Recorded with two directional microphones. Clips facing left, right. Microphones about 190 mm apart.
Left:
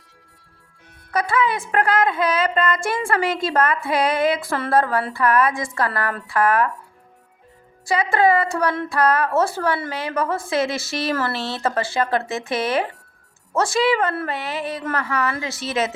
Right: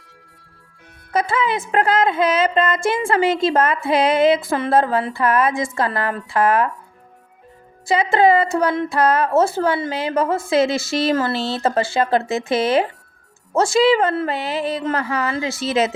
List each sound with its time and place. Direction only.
1.1 s speech: 25° right (ahead or behind)
7.9 s speech: 25° right (ahead or behind)